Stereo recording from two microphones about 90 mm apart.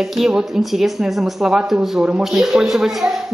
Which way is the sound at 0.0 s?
5° right (ahead or behind).